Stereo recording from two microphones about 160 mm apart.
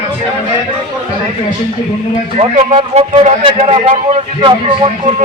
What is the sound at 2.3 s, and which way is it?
Speech, 40° right (ahead or behind).